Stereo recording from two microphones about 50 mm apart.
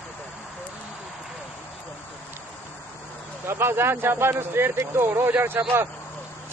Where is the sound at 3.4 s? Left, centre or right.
Right.